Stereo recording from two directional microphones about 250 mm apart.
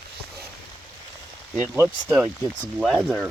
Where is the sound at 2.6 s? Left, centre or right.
Centre.